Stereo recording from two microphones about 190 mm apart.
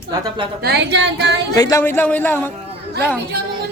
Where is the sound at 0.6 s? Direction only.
60° right (ahead or behind).